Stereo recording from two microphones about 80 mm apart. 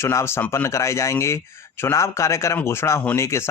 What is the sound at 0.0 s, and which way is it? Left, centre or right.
Speech, left.